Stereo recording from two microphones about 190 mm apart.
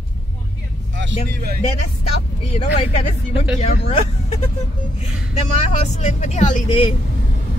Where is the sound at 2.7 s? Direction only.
35° left (ahead or behind).